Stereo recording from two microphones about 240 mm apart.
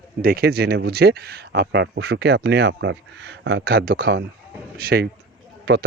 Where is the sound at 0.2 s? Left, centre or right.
Right.